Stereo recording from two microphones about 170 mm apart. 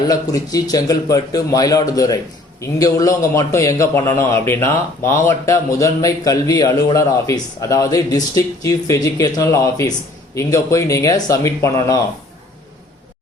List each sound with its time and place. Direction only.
0.1 s a man's voice: 20° left (ahead or behind)